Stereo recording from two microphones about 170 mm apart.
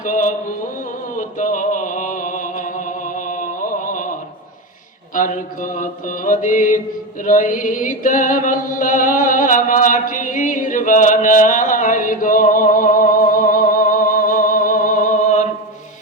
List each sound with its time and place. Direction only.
0.0 s mantra: 50° left (ahead or behind)
1.4 s music: 50° left (ahead or behind)
5.1 s mantra: 50° left (ahead or behind)
7.3 s music: 50° left (ahead or behind)